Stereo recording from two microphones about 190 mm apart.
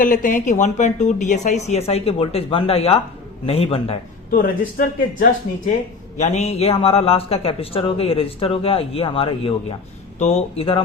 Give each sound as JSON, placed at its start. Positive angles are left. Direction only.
{"t": 0.0, "sound": "a man's voice", "side_deg": 45}
{"t": 4.3, "sound": "speech", "side_deg": 50}
{"t": 6.1, "sound": "a man's voice", "side_deg": 35}